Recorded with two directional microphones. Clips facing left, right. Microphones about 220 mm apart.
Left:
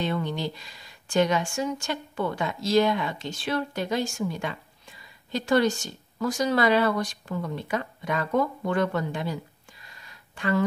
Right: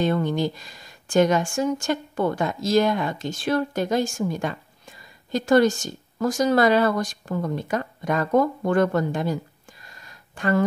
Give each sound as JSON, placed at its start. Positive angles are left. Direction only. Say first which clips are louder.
{"t": 0.0, "sound": "speech", "louder": "right 6 dB", "side_deg": -45}